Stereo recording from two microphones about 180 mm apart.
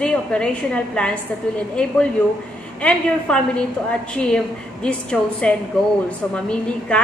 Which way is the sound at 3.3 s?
5° left (ahead or behind).